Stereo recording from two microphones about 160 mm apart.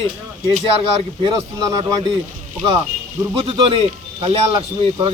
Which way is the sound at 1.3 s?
25° right (ahead or behind).